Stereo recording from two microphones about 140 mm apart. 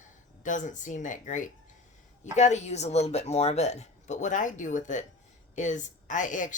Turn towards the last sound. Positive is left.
turn(degrees=65)  # may be behind; listen again after turning